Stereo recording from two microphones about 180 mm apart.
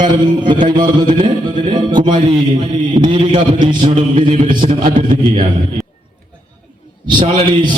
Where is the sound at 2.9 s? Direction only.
25° right (ahead or behind).